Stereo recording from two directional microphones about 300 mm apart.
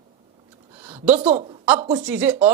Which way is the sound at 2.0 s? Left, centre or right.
Centre.